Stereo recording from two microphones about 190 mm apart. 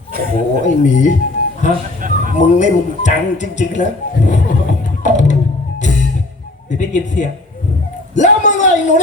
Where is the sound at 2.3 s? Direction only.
40° left (ahead or behind).